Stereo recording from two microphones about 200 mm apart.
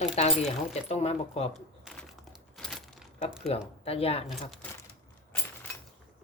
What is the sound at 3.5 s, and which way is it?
Speech, 30° left (ahead or behind).